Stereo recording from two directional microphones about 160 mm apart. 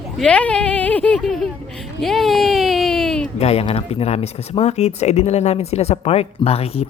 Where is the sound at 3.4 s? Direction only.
40° left (ahead or behind).